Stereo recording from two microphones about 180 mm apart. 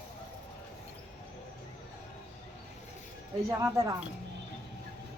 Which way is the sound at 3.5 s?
20° right (ahead or behind).